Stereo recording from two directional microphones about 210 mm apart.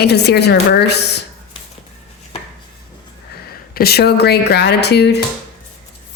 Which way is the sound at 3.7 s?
50° left (ahead or behind).